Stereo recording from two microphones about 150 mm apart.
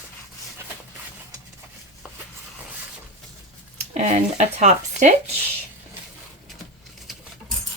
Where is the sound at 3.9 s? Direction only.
55° right (ahead or behind).